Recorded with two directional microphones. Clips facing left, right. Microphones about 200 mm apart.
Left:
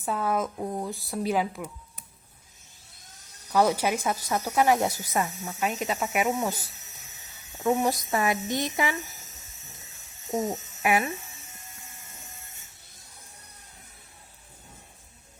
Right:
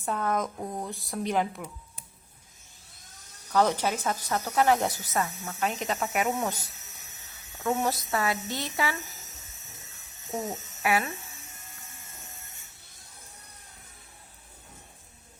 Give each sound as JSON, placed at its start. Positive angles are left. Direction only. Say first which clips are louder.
{"t": 0.0, "sound": "a woman's voice", "louder": "left 1 dB", "side_deg": 5}
{"t": 3.5, "sound": "speech", "louder": "left 2 dB", "side_deg": 10}
{"t": 10.8, "sound": "speech", "louder": "left 2 dB", "side_deg": 20}